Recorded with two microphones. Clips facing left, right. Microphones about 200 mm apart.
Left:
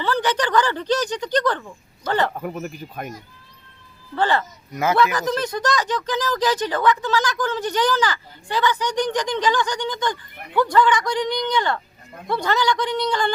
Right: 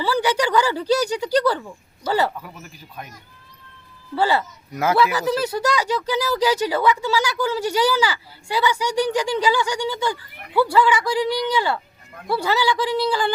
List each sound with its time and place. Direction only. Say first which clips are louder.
0.0 s speech: right 2 dB; 10° right (ahead or behind)
2.3 s speech: left 9 dB; 50° left (ahead or behind)
4.1 s speech: right 1 dB; 10° right (ahead or behind)